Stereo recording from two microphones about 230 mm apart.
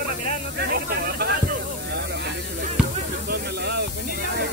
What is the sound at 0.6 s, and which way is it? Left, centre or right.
Snake, right.